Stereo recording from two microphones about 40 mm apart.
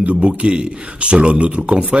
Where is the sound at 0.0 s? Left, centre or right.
Right.